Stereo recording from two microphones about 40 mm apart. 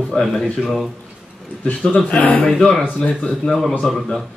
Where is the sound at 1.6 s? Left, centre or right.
Left.